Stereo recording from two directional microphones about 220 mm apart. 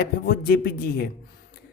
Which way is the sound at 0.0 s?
45° left (ahead or behind).